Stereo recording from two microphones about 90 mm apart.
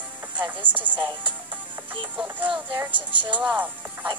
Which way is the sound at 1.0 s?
55° right (ahead or behind).